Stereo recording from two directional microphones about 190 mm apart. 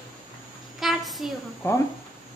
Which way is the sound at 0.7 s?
Centre (ahead or behind).